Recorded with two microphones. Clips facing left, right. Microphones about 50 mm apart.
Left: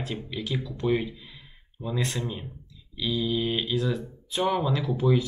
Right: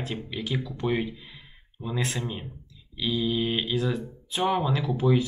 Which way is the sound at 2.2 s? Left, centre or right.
Centre.